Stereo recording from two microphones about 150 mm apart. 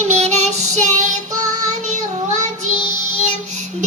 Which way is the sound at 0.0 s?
45° right (ahead or behind).